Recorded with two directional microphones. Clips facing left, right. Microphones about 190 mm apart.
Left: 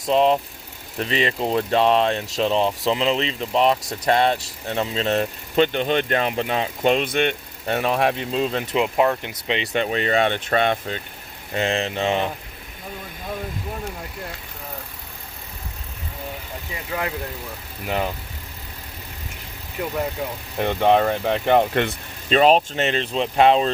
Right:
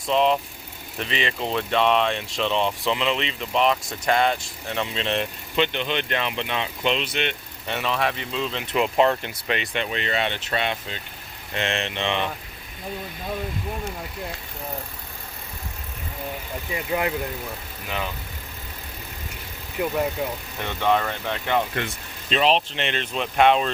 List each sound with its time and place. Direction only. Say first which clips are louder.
0.0 s speech: left 3 dB; 35° left (ahead or behind)
8.7 s speech: right 1 dB; 10° left (ahead or behind)
9.7 s speech: left 10 dB; 40° left (ahead or behind)
11.5 s speech: left 4 dB; 35° left (ahead or behind)
17.8 s speech: left 6 dB; 50° left (ahead or behind)
19.8 s speech: right 2 dB; 10° right (ahead or behind)
20.6 s speech: left 6 dB; 45° left (ahead or behind)